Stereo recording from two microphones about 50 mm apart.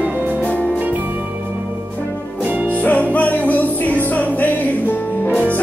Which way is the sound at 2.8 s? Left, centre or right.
Left.